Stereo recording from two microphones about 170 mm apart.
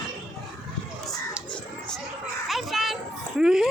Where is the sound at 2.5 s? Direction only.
Centre (ahead or behind).